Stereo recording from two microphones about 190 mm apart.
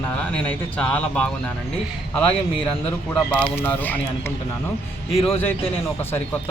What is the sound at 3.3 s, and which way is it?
Speech, 10° left (ahead or behind).